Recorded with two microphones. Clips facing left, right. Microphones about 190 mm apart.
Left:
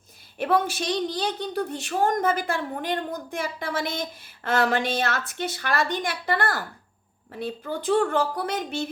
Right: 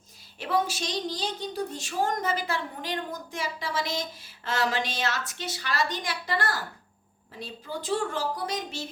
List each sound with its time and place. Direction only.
0.3 s a woman's voice: 55° left (ahead or behind)